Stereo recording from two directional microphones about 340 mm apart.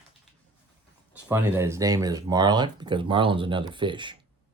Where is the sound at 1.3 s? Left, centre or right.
Centre.